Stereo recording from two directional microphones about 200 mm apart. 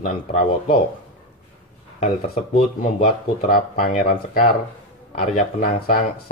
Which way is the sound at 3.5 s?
40° left (ahead or behind).